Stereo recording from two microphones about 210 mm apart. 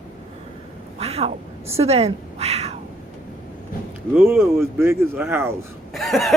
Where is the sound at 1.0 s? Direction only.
30° right (ahead or behind).